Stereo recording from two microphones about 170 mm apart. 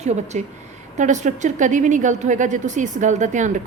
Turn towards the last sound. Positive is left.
turn(degrees=-45)  # may be behind; listen again after turning